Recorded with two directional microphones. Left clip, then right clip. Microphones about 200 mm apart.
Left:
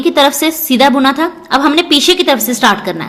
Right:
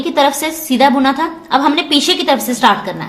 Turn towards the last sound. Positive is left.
turn(degrees=35)  # may be behind; listen again after turning